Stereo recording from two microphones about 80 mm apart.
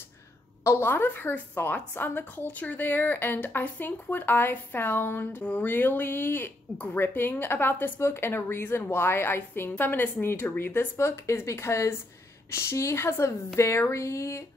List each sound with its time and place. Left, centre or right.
0.7 s speech: left